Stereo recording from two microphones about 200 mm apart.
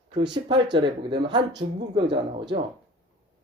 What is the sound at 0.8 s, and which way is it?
A man's voice, 25° right (ahead or behind).